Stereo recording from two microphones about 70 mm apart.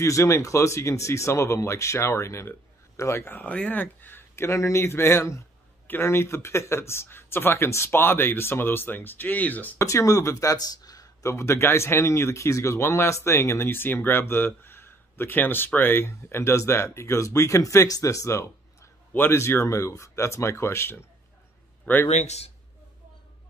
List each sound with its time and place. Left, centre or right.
0.0 s speech: left
3.4 s speech: left
9.8 s speech: left
11.2 s speech: left
21.9 s a man's voice: left